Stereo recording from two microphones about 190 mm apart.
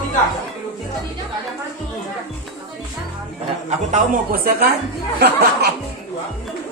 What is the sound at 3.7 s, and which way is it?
Speech, 45° right (ahead or behind).